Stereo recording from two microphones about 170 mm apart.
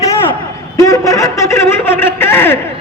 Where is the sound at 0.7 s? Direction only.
20° left (ahead or behind).